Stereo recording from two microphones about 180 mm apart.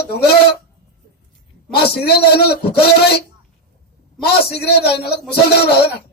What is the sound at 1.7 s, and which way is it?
Speech, 65° left (ahead or behind).